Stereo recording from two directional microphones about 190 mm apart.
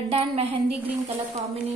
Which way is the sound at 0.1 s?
30° right (ahead or behind).